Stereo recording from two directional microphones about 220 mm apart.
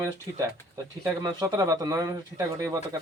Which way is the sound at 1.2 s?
15° right (ahead or behind).